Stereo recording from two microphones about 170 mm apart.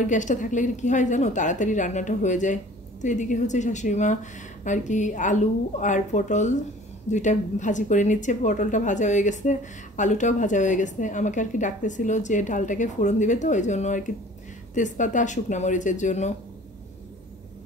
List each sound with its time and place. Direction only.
0.0 s a woman's voice: 45° left (ahead or behind)